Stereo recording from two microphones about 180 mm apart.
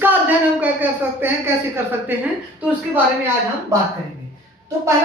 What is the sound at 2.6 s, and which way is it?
Speech, 10° right (ahead or behind).